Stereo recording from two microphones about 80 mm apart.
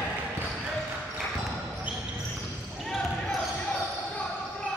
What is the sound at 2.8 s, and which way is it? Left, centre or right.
Basketball bounce, centre.